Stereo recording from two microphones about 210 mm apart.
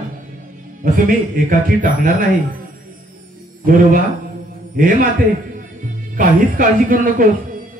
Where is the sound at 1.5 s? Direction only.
40° right (ahead or behind).